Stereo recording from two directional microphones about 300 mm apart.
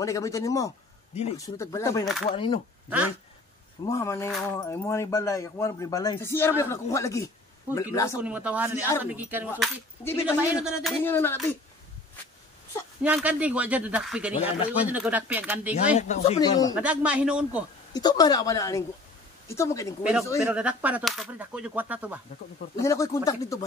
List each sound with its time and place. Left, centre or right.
0.0 s speech: centre
3.8 s speech: centre
8.2 s speech: centre
13.0 s speech: centre
16.0 s speech: left
16.7 s speech: centre
17.9 s speech: centre
20.0 s speech: centre
22.8 s speech: centre